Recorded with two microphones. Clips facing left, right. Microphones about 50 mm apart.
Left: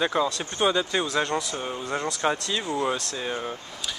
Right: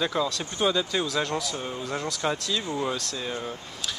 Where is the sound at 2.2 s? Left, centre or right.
Left.